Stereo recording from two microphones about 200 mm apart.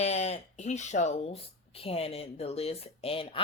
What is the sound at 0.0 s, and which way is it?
Speech, 35° left (ahead or behind).